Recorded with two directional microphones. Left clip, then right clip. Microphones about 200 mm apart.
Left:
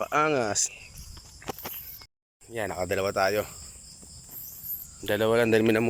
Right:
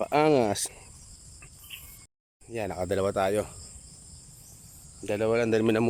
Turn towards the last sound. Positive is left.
turn(degrees=-10)  # may be behind; listen again after turning